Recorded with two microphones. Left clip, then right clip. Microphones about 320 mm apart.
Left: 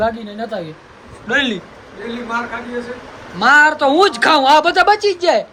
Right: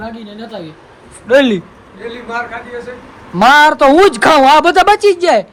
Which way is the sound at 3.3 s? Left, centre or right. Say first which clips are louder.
Right 4 dB; centre.